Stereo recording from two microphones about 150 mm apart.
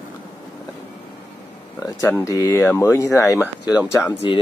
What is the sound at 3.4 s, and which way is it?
Speech, 10° right (ahead or behind).